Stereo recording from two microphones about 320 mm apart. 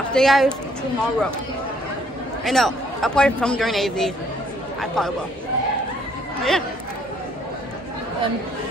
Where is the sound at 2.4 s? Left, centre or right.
Centre.